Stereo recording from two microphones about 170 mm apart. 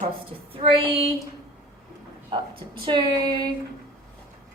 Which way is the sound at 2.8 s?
25° right (ahead or behind).